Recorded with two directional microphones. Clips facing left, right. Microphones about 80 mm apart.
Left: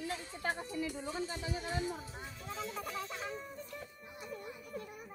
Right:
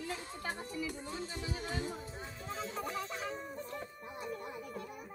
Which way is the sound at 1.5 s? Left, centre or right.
Right.